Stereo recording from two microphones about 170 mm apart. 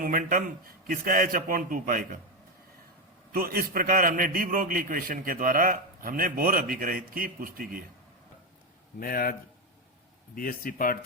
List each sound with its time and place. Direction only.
0.0 s a man's voice: 55° right (ahead or behind)
3.3 s a man's voice: 60° right (ahead or behind)
9.0 s speech: 60° left (ahead or behind)
10.3 s speech: 55° left (ahead or behind)